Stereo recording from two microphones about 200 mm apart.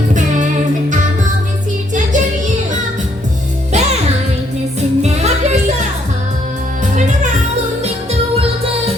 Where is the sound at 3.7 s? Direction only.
35° right (ahead or behind).